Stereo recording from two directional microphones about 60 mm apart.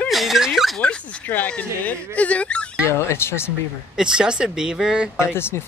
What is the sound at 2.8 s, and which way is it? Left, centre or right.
Speech, left.